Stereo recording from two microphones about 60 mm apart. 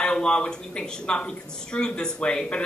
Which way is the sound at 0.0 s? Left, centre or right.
Centre.